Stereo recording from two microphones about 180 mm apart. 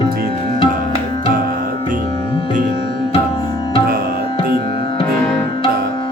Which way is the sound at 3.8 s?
55° right (ahead or behind).